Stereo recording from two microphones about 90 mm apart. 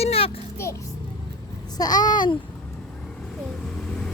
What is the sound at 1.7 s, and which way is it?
Speech, 45° left (ahead or behind).